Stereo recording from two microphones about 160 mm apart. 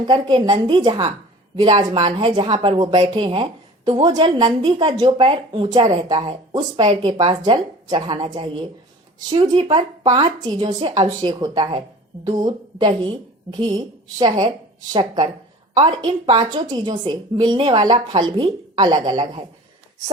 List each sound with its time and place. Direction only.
0.1 s a woman's voice: 25° right (ahead or behind)
9.3 s a woman's voice: 30° right (ahead or behind)
15.7 s a woman's voice: 30° right (ahead or behind)